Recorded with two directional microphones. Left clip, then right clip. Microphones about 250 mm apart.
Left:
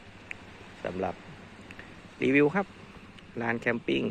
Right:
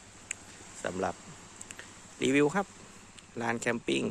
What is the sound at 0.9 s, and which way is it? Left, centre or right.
Speech, right.